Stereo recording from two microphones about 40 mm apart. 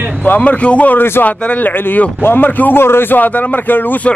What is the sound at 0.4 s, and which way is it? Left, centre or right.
Speech, left.